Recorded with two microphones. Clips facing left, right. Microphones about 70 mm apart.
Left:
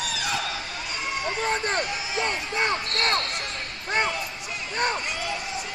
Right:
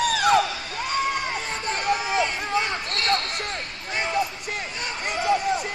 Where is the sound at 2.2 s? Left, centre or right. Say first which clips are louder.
Even; left.